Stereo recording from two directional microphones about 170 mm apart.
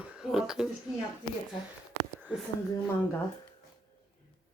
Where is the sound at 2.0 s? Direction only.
75° right (ahead or behind).